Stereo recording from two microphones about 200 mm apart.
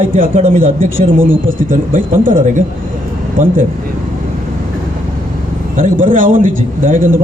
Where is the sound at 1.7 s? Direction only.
45° right (ahead or behind).